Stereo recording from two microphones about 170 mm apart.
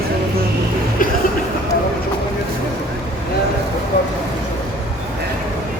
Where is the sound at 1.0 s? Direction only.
55° left (ahead or behind).